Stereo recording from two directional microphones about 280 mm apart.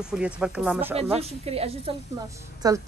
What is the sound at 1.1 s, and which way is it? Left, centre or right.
A woman's voice, right.